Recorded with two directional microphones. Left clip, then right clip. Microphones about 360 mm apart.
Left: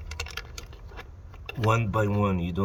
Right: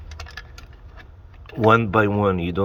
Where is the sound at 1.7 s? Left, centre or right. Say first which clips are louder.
Right 8 dB; centre.